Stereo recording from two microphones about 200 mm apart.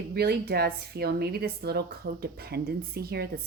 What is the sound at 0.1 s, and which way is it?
Speech, 50° right (ahead or behind).